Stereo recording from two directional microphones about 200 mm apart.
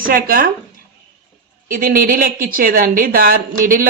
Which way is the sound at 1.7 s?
45° right (ahead or behind).